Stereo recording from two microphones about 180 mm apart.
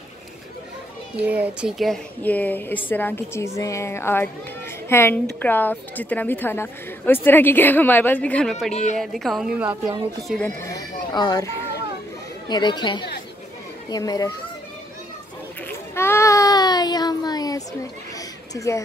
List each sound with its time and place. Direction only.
1.2 s a woman's voice: 10° right (ahead or behind)
10.6 s speech: 20° left (ahead or behind)
15.9 s child singing: 15° left (ahead or behind)
18.1 s a sound: 20° left (ahead or behind)